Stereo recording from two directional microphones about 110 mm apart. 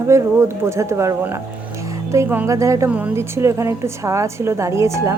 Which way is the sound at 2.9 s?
15° right (ahead or behind).